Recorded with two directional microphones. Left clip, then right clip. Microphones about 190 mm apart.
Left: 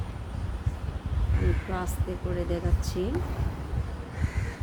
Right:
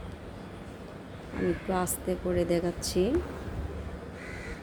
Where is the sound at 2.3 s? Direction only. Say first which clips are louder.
Right 4 dB; 30° right (ahead or behind).